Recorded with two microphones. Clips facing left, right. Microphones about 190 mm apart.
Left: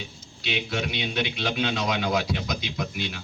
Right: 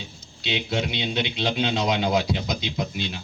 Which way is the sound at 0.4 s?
25° right (ahead or behind).